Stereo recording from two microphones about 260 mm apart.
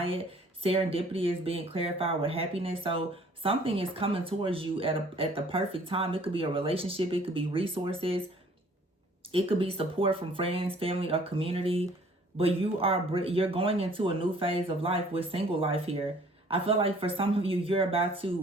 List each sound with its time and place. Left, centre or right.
0.0 s speech: right
9.3 s speech: right